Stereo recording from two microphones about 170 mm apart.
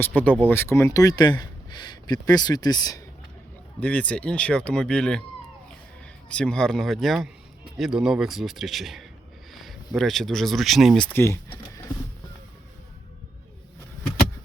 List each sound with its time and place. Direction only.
0.0 s speech: 10° left (ahead or behind)
3.8 s speech: 10° left (ahead or behind)
6.2 s speech: 5° left (ahead or behind)